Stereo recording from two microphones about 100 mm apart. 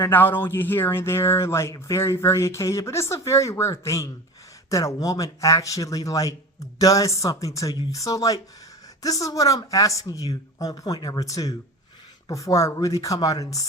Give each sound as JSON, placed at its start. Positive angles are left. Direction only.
{"t": 0.1, "sound": "speech", "side_deg": 20}